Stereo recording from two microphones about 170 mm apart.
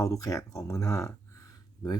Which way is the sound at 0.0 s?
20° left (ahead or behind).